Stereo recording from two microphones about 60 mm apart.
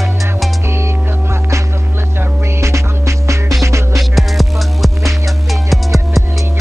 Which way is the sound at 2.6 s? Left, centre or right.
Right.